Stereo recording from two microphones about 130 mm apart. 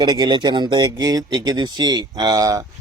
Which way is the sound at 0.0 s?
35° right (ahead or behind).